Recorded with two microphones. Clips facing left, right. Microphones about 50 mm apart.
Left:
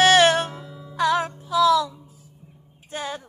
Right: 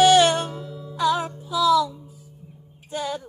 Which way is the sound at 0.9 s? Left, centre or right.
Left.